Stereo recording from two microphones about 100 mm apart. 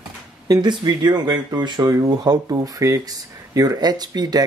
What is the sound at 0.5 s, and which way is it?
Speech, 45° right (ahead or behind).